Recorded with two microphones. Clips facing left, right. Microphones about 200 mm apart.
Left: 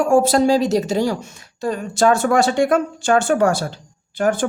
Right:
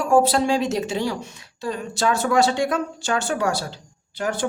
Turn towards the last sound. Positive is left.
turn(degrees=50)  # may be behind; listen again after turning